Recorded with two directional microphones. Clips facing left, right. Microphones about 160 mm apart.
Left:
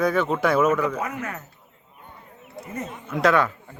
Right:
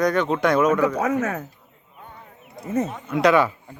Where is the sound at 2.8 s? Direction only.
75° right (ahead or behind).